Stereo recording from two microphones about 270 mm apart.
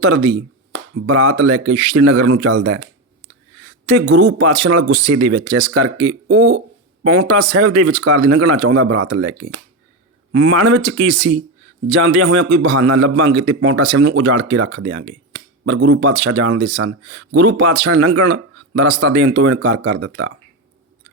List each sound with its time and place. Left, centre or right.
0.0 s speech: right
5.1 s speech: right
5.7 s speech: right